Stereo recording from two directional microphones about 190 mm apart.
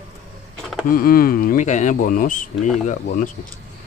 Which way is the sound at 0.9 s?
50° left (ahead or behind).